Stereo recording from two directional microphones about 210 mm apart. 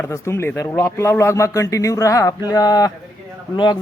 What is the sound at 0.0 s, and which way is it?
A man's voice, 10° left (ahead or behind).